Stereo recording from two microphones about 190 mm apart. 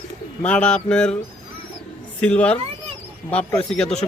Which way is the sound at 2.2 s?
5° left (ahead or behind).